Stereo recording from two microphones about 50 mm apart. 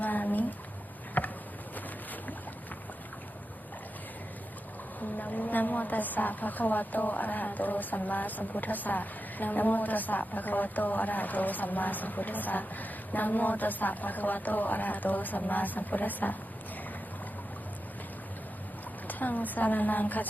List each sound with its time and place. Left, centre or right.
0.0 s a sound: left
1.2 s insect: left
4.9 s a woman's voice: left
19.0 s a woman's voice: left